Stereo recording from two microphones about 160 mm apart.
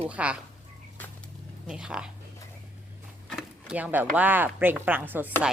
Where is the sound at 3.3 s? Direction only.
5° right (ahead or behind).